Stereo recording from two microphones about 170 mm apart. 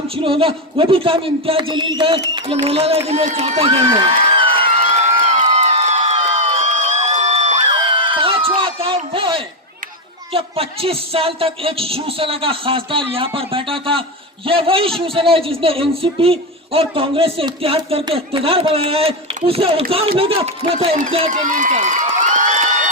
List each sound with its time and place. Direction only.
0.2 s a man's voice: 30° right (ahead or behind)
3.9 s a sound: 30° right (ahead or behind)
4.9 s crowd: 45° right (ahead or behind)
7.7 s a sound: 30° right (ahead or behind)
10.3 s a man's voice: 35° right (ahead or behind)
21.3 s run: 50° right (ahead or behind)